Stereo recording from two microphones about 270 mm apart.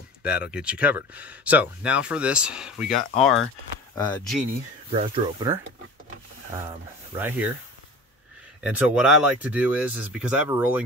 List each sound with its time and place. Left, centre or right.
0.5 s speech: centre
4.9 s speech: centre
6.5 s speech: centre
8.6 s speech: centre